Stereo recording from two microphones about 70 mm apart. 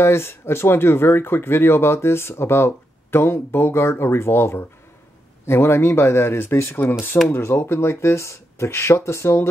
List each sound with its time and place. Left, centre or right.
0.0 s speech: left